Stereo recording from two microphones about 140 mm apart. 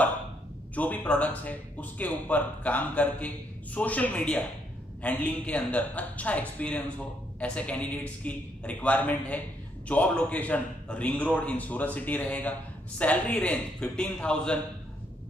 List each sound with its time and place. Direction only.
0.7 s speech: 10° left (ahead or behind)